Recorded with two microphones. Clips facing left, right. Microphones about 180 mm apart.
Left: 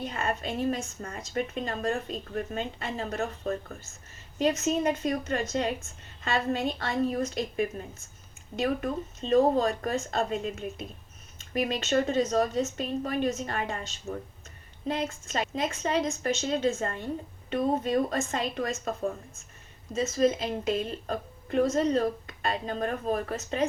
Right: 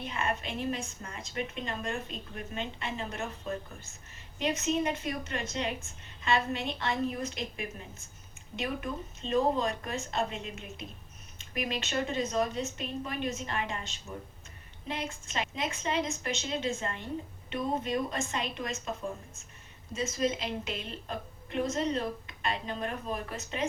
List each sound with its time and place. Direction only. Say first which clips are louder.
0.0 s a woman's voice: left 3 dB; 40° left (ahead or behind)
4.4 s a woman's voice: left 4 dB; 40° left (ahead or behind)
20.1 s a woman's voice: left 6 dB; 45° left (ahead or behind)